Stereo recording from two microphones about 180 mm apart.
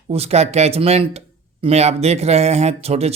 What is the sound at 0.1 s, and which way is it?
Speech, 35° right (ahead or behind).